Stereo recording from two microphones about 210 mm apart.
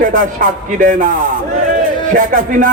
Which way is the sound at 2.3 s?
40° right (ahead or behind).